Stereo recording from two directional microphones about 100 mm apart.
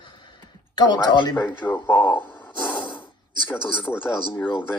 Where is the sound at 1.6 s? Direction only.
20° left (ahead or behind).